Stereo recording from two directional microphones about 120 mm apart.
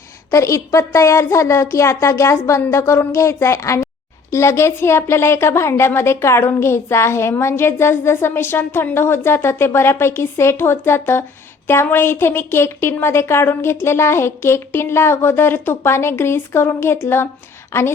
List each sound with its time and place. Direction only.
0.3 s a woman's voice: 25° left (ahead or behind)